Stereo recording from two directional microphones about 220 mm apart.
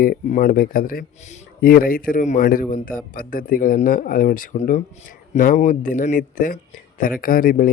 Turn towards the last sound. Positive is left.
turn(degrees=40)  # may be behind; listen again after turning